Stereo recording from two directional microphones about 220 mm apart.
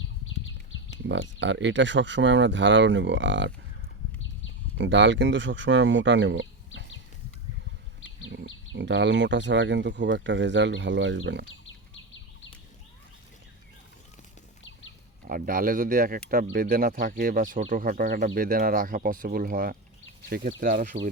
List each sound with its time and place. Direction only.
1.0 s speech: 55° right (ahead or behind)
4.8 s speech: 55° right (ahead or behind)
8.7 s speech: 50° right (ahead or behind)
11.6 s a sound: 60° left (ahead or behind)
15.3 s speech: 40° right (ahead or behind)